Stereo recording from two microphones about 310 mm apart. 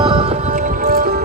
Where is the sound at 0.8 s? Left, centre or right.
Right.